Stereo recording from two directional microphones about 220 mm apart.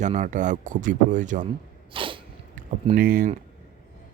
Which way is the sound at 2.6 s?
35° right (ahead or behind).